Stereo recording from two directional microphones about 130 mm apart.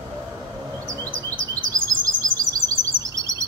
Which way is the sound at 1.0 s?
15° left (ahead or behind).